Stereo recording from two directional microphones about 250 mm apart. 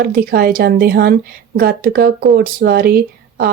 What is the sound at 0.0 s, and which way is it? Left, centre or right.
A woman's voice, right.